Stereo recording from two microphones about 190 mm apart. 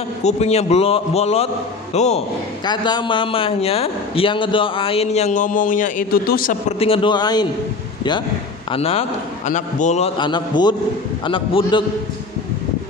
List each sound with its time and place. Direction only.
0.2 s a man's voice: 35° left (ahead or behind)
2.6 s a man's voice: 20° left (ahead or behind); by 6.5 s 50° left (ahead or behind)
6.8 s a man's voice: 25° left (ahead or behind)
8.7 s a man's voice: 30° left (ahead or behind)